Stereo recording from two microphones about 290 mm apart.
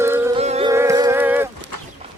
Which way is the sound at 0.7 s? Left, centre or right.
Centre.